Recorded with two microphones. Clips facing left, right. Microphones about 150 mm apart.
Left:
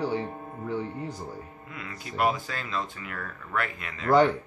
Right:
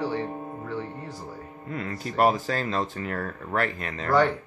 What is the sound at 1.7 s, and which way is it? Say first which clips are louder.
Speech: right 5 dB; 40° right (ahead or behind).